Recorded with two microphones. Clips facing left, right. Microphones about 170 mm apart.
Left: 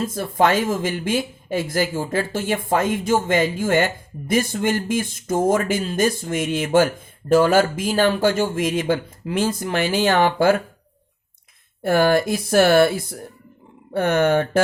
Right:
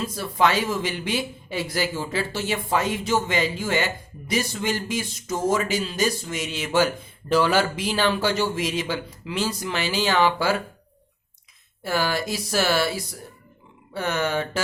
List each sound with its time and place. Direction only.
0.0 s speech: 50° left (ahead or behind)
11.8 s speech: 55° left (ahead or behind)